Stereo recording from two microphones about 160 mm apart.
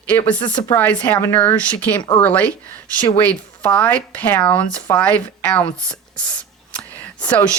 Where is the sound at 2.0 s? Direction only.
25° left (ahead or behind).